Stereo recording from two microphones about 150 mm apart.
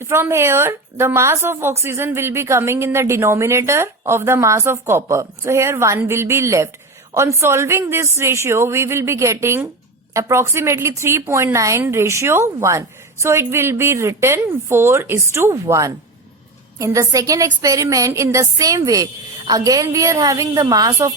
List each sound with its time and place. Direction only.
0.0 s a woman's voice: 15° right (ahead or behind)